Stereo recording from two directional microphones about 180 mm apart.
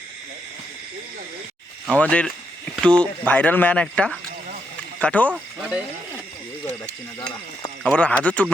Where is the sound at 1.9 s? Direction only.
5° left (ahead or behind).